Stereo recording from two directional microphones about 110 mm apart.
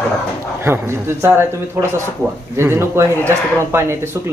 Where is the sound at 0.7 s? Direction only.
20° right (ahead or behind).